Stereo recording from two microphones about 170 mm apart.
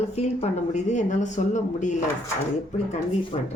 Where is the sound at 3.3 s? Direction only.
30° left (ahead or behind).